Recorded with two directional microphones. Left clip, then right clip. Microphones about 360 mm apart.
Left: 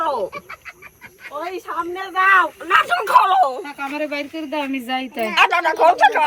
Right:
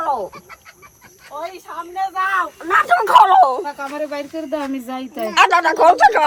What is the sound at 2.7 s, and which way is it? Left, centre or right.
Speech, centre.